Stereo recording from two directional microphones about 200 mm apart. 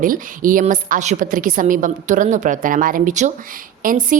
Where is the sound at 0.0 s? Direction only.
45° right (ahead or behind).